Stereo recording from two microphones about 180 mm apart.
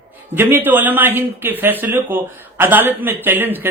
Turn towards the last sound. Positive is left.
turn(degrees=-10)  # may be behind; listen again after turning